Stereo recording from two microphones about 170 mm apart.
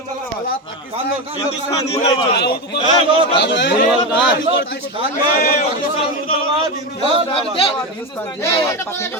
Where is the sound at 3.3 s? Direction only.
90° left.